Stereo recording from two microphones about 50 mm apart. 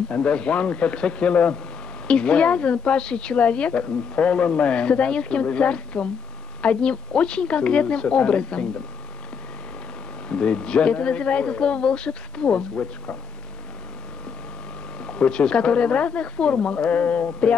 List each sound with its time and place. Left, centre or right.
0.1 s a woman's voice: left
10.2 s a woman's voice: left
15.0 s a woman's voice: centre